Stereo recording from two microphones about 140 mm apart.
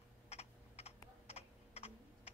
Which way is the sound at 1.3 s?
50° left (ahead or behind).